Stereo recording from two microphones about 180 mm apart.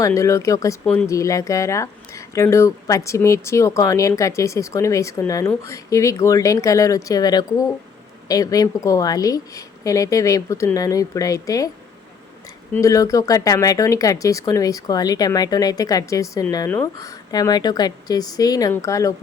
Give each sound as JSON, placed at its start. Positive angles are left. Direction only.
{"t": 0.0, "sound": "speech", "side_deg": 15}
{"t": 12.7, "sound": "speech", "side_deg": 20}